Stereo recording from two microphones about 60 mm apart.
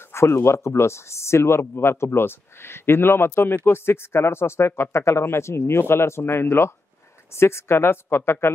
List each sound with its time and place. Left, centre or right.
0.1 s speech: left